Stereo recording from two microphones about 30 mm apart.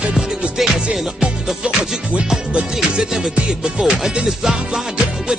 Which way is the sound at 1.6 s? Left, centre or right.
Right.